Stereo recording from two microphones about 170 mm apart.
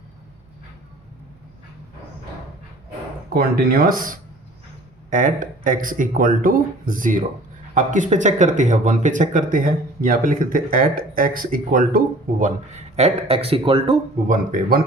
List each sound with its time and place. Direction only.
3.3 s speech: 60° right (ahead or behind); by 14.0 s 35° right (ahead or behind)